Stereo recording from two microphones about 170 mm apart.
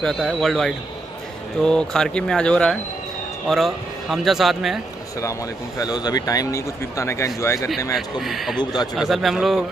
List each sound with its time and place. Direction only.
0.0 s a man's voice: centre (ahead or behind)
5.8 s speech: 25° left (ahead or behind)
8.2 s a man's voice: centre (ahead or behind)